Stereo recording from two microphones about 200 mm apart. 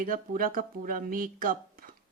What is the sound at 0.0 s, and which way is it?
A woman's voice, 45° right (ahead or behind).